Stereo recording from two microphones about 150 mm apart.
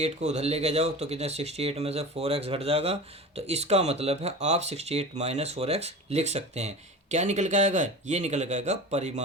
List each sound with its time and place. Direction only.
0.0 s speech: 45° right (ahead or behind)